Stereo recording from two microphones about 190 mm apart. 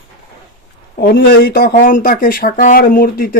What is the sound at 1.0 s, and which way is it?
Speech, 60° left (ahead or behind).